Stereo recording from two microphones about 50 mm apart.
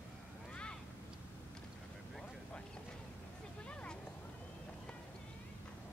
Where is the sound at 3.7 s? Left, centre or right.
Left.